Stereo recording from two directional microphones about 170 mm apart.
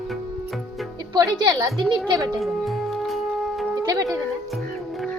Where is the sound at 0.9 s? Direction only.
25° right (ahead or behind).